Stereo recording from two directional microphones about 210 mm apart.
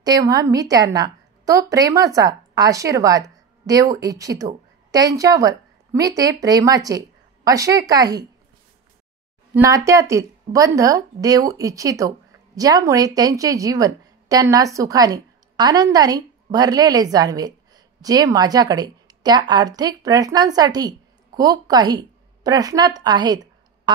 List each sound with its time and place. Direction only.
0.0 s a woman's voice: 15° right (ahead or behind)
9.5 s a woman's voice: 15° right (ahead or behind)